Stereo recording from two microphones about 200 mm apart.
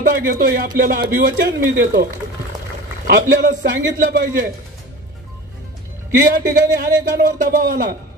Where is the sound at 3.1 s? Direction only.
45° right (ahead or behind).